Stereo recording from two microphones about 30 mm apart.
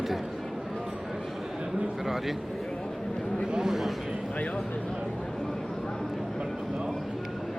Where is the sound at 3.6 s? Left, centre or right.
Centre.